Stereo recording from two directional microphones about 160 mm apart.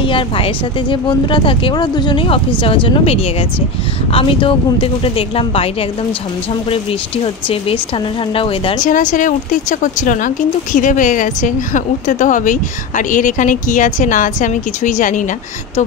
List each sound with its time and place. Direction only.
0.0 s speech: 30° left (ahead or behind)
7.4 s speech: 35° left (ahead or behind)
8.8 s speech: 55° left (ahead or behind)